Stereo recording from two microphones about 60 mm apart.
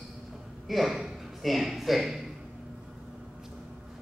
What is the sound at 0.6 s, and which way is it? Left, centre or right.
Speech, centre.